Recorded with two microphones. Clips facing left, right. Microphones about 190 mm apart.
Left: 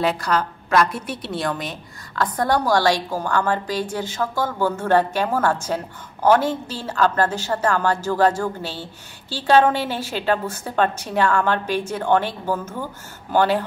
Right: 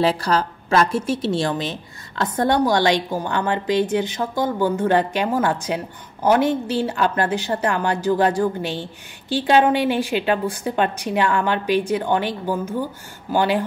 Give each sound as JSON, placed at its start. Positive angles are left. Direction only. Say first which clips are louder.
{"t": 0.0, "sound": "a woman's voice", "louder": "right 2 dB", "side_deg": -30}